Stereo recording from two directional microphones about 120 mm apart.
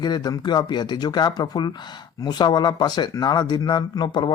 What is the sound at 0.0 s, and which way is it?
Speech, 35° left (ahead or behind).